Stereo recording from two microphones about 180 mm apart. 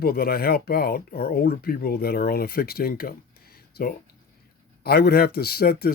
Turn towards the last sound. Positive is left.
turn(degrees=60)  # may be behind; listen again after turning